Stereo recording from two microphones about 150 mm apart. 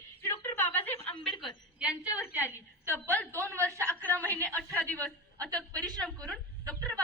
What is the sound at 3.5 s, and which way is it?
Speech, 20° right (ahead or behind).